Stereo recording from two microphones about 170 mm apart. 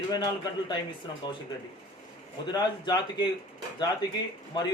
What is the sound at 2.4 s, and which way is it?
Speech, 25° left (ahead or behind).